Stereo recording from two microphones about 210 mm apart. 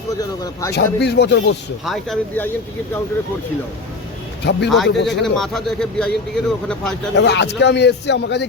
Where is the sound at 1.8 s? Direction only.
Centre (ahead or behind).